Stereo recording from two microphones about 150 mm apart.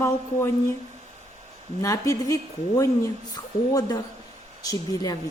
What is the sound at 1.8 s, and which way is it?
A woman's voice, 20° left (ahead or behind).